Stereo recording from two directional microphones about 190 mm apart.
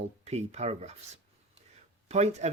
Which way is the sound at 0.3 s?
35° right (ahead or behind).